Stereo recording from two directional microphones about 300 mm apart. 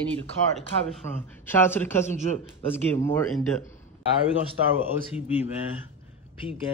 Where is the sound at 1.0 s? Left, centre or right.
Centre.